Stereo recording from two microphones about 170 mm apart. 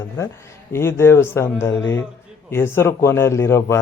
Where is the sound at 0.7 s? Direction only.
15° left (ahead or behind).